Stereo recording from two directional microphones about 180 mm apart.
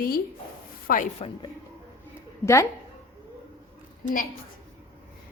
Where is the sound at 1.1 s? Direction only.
30° left (ahead or behind).